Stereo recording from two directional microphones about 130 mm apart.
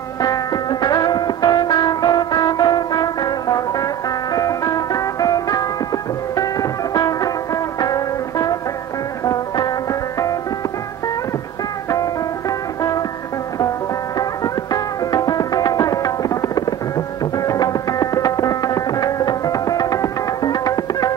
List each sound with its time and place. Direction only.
0.2 s music: 30° left (ahead or behind)
11.9 s music: 25° left (ahead or behind)
14.1 s music: 30° left (ahead or behind)